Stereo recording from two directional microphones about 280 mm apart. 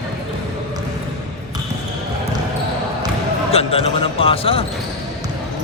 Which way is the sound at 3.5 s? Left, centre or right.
Left.